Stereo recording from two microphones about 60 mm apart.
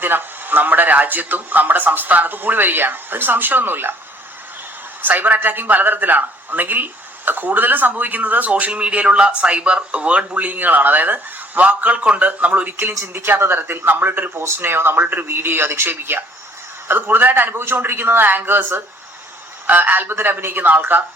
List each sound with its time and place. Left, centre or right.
0.0 s a man's voice: right
5.0 s a man's voice: right
13.1 s a man's voice: right